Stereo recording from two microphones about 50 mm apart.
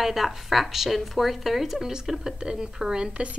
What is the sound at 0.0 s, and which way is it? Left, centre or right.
A woman's voice, centre.